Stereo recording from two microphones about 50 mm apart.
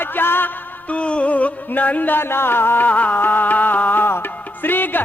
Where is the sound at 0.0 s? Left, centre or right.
Left.